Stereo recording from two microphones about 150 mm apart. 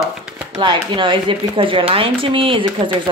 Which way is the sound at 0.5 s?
30° right (ahead or behind).